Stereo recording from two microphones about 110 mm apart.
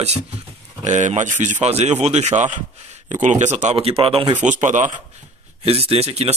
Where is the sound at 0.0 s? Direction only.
70° right (ahead or behind).